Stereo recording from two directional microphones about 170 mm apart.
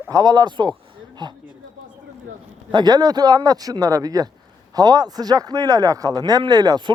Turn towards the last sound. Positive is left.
turn(degrees=-25)  # may be behind; listen again after turning